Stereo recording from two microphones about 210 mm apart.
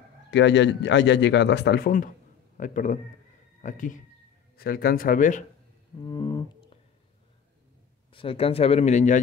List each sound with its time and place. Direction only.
0.3 s a man's voice: 55° left (ahead or behind); by 5.4 s 40° left (ahead or behind)
6.0 s whale vocalization: 20° left (ahead or behind)
8.1 s speech: 25° left (ahead or behind)